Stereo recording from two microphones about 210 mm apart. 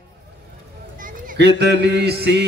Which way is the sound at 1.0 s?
45° right (ahead or behind).